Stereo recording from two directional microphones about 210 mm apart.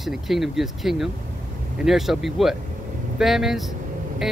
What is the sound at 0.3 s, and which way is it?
Speech, centre (ahead or behind).